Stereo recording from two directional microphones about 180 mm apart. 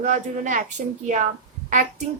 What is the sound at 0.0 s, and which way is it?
Speech, 45° right (ahead or behind).